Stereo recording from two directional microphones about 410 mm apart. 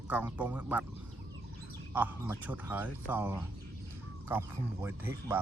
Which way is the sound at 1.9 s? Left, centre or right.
Centre.